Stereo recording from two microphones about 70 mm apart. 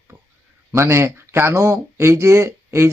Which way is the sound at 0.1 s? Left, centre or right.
Right.